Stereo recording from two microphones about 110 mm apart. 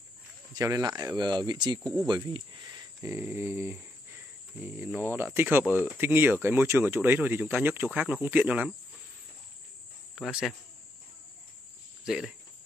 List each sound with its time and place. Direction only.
0.6 s speech: 30° right (ahead or behind); by 8.7 s 15° right (ahead or behind)
10.1 s speech: centre (ahead or behind)
12.0 s cricket: 5° right (ahead or behind)